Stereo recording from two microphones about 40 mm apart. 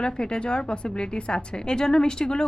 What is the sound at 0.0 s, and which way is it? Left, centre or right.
A woman's voice, left.